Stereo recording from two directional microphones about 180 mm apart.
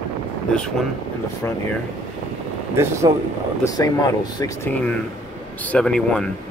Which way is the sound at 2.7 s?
15° right (ahead or behind).